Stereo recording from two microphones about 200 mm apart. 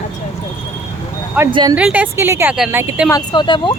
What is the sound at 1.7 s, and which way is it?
A woman's voice, 5° right (ahead or behind).